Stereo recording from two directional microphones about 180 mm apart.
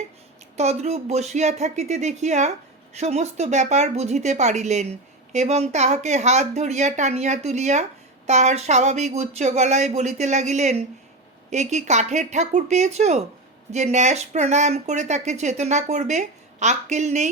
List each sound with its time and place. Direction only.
0.5 s speech: 35° right (ahead or behind)